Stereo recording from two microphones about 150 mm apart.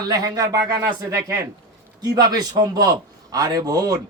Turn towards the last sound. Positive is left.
turn(degrees=-25)  # may be behind; listen again after turning